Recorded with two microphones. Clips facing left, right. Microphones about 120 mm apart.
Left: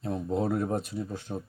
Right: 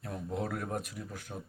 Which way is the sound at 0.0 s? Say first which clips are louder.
Left 7 dB; 25° left (ahead or behind).